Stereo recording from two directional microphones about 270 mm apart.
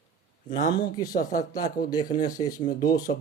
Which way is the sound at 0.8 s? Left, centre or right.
Centre.